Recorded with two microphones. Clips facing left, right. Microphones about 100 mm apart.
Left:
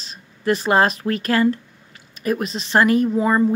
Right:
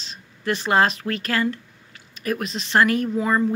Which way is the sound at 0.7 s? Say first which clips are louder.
Left 1 dB; 35° left (ahead or behind).